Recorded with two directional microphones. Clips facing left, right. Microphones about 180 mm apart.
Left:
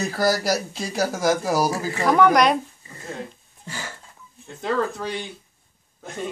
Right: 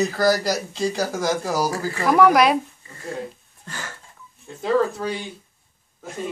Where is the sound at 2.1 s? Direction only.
5° right (ahead or behind).